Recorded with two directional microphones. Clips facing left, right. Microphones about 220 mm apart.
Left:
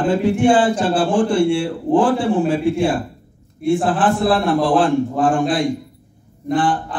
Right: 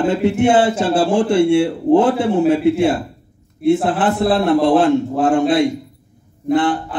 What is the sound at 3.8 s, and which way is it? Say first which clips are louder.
A man's voice: even; 20° right (ahead or behind).